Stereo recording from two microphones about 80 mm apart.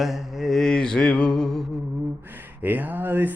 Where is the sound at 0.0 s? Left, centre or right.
Centre.